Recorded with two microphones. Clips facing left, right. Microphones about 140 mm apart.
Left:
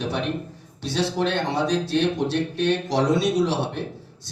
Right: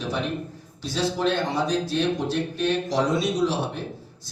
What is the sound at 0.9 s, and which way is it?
A man's voice, 70° left (ahead or behind).